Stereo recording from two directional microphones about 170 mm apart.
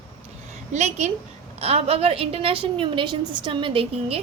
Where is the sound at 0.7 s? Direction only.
40° right (ahead or behind).